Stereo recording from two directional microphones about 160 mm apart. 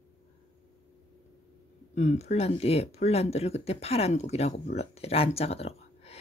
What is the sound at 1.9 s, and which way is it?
Speech, 45° left (ahead or behind).